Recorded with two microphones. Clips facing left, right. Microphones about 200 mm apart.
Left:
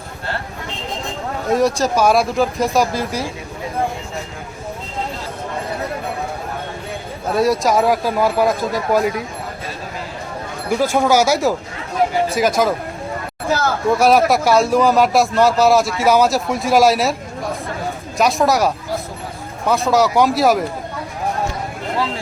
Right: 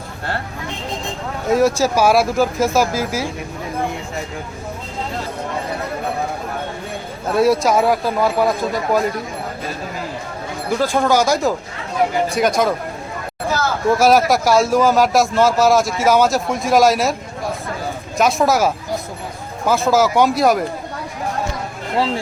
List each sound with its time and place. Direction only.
1.5 s speech: 5° right (ahead or behind)
7.3 s speech: centre (ahead or behind)
10.9 s speech: 10° left (ahead or behind)
14.0 s speech: centre (ahead or behind)
18.2 s speech: centre (ahead or behind)
21.9 s speech: 30° right (ahead or behind)